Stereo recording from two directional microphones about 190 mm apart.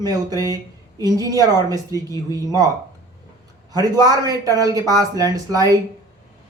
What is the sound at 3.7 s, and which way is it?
A man's voice, 20° right (ahead or behind).